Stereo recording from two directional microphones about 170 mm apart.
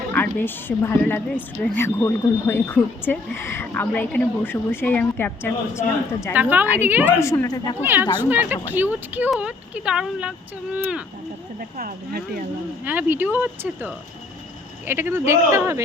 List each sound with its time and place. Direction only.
0.1 s speech: 10° left (ahead or behind)
6.3 s speech: 10° right (ahead or behind)
7.2 s a woman's voice: 15° left (ahead or behind)
7.8 s speech: 10° right (ahead or behind)
11.8 s speech: 60° right (ahead or behind)
12.8 s speech: 10° right (ahead or behind)